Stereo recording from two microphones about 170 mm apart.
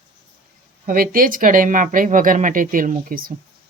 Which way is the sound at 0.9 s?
55° right (ahead or behind).